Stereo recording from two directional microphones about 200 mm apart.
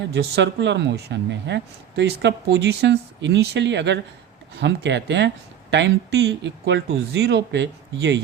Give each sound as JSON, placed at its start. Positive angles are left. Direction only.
{"t": 0.1, "sound": "speech", "side_deg": -55}